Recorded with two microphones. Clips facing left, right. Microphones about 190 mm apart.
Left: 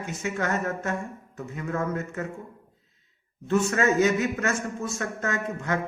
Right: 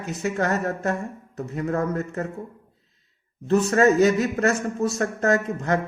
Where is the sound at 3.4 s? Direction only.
35° right (ahead or behind).